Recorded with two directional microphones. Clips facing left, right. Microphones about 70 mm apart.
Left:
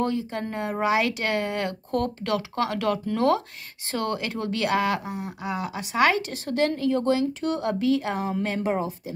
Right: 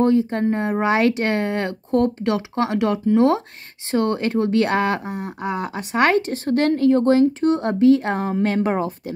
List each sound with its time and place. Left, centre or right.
0.0 s speech: right
0.8 s speech: right